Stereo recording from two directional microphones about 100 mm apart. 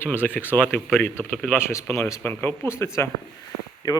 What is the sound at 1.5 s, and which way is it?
Speech, 25° left (ahead or behind).